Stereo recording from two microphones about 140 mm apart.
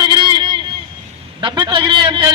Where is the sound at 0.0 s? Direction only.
35° right (ahead or behind).